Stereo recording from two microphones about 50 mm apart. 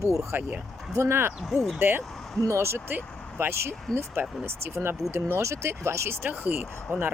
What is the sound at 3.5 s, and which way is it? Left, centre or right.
Speech, right.